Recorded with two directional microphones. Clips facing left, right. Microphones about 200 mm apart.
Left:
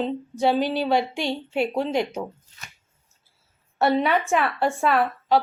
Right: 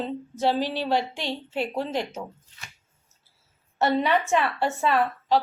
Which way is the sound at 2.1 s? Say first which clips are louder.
Left 5 dB; 45° left (ahead or behind).